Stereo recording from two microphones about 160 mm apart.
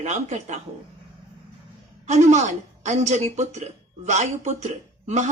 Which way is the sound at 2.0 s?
45° right (ahead or behind).